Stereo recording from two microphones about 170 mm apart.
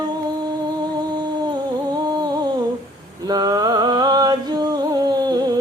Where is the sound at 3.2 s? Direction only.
25° right (ahead or behind).